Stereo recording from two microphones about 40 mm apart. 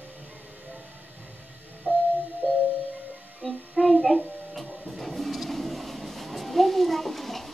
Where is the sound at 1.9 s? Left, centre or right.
Right.